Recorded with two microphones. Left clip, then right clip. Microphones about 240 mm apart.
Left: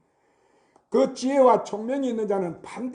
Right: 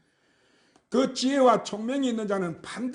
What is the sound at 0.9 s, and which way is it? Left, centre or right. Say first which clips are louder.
A man's voice: left 4 dB; right.